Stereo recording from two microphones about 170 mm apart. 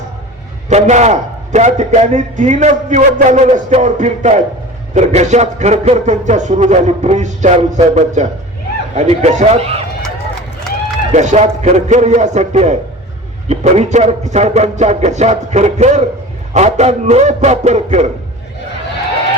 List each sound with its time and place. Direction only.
0.7 s a man's voice: 40° right (ahead or behind)
11.1 s a man's voice: 45° right (ahead or behind)